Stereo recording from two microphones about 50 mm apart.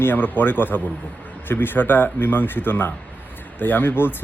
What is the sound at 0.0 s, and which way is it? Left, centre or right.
Speech, left.